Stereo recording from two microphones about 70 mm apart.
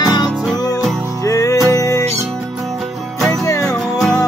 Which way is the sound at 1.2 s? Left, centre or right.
Left.